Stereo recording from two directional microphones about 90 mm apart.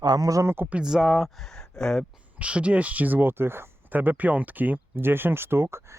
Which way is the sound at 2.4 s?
15° right (ahead or behind).